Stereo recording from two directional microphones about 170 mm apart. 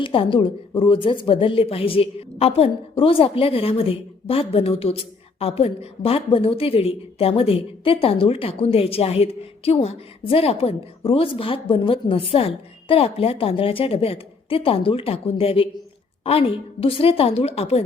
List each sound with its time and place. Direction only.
0.0 s a woman's voice: 30° left (ahead or behind)